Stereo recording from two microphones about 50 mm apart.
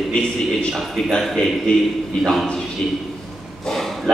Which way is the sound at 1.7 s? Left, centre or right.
Left.